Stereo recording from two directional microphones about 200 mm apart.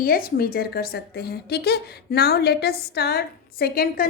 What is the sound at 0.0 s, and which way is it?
A woman's voice, 45° left (ahead or behind).